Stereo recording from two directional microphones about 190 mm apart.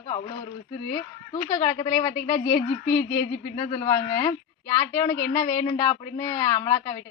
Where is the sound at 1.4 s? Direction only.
15° left (ahead or behind).